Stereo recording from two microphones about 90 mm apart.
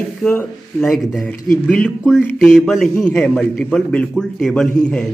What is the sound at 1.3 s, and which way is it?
Speech, 15° left (ahead or behind).